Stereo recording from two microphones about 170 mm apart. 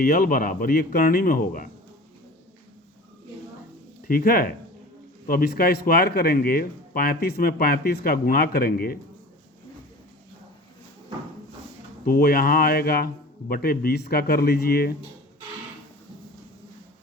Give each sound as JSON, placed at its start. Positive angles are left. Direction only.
{"t": 0.0, "sound": "speech", "side_deg": 60}
{"t": 4.0, "sound": "speech", "side_deg": 60}
{"t": 12.0, "sound": "speech", "side_deg": 60}